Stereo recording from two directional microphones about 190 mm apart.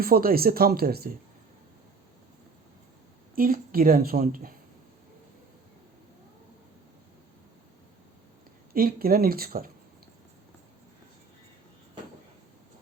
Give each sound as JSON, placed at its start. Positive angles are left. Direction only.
{"t": 0.0, "sound": "a woman's voice", "side_deg": -50}
{"t": 3.3, "sound": "a woman's voice", "side_deg": -50}
{"t": 8.7, "sound": "a woman's voice", "side_deg": -50}